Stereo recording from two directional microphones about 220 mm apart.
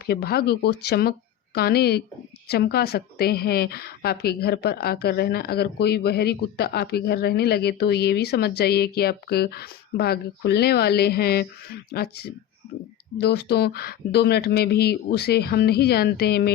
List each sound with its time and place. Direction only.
0.0 s a woman's voice: 45° left (ahead or behind)